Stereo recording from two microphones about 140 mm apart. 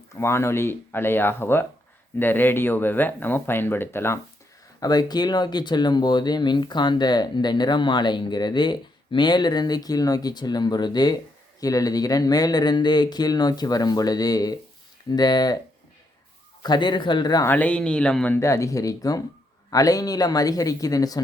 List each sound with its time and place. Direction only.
0.2 s speech: 20° left (ahead or behind)
4.8 s speech: 30° left (ahead or behind)
16.6 s speech: 30° left (ahead or behind)
17.5 s speech: 10° left (ahead or behind)
18.3 s speech: 20° left (ahead or behind)